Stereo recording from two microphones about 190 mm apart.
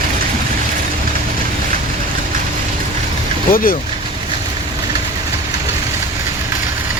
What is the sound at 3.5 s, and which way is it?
Speech, 50° left (ahead or behind).